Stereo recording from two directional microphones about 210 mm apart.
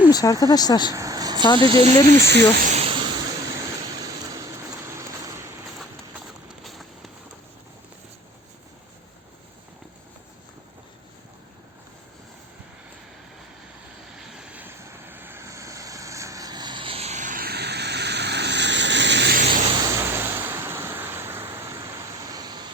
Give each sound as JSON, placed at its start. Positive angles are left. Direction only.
{"t": 0.1, "sound": "speech", "side_deg": 20}
{"t": 0.9, "sound": "a sound", "side_deg": -15}
{"t": 1.5, "sound": "speech", "side_deg": -25}
{"t": 2.2, "sound": "speech", "side_deg": -50}
{"t": 2.6, "sound": "a sound", "side_deg": -30}
{"t": 6.7, "sound": "vehicle", "side_deg": 0}
{"t": 14.3, "sound": "vehicle", "side_deg": -5}
{"t": 19.7, "sound": "vehicle", "side_deg": -15}